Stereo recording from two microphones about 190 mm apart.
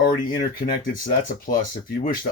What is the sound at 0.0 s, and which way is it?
Speech, 45° left (ahead or behind).